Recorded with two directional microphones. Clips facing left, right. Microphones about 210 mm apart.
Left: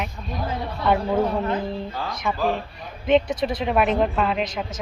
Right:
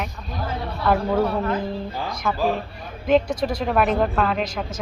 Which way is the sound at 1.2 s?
25° left (ahead or behind).